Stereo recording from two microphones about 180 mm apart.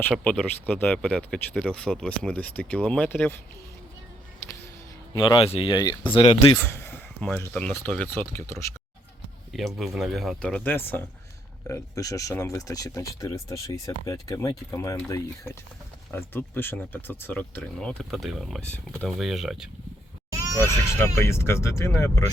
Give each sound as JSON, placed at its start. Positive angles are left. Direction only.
{"t": 0.0, "sound": "speech", "side_deg": 5}
{"t": 5.1, "sound": "speech", "side_deg": 25}
{"t": 6.6, "sound": "speech", "side_deg": 10}
{"t": 9.5, "sound": "speech", "side_deg": 0}
{"t": 21.2, "sound": "speech", "side_deg": 15}